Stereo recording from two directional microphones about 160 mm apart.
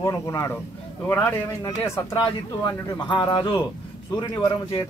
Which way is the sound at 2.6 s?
25° left (ahead or behind).